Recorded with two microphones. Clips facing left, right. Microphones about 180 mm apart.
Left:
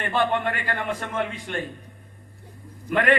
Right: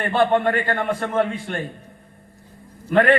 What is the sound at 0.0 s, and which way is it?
A man's voice, 40° right (ahead or behind).